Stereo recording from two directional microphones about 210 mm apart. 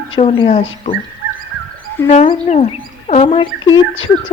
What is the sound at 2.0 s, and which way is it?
Speech, 30° left (ahead or behind).